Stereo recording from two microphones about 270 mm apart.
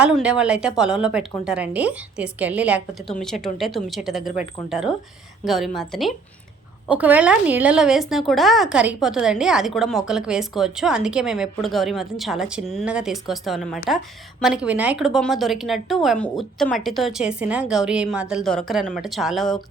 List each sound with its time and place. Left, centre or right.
0.0 s a woman's voice: centre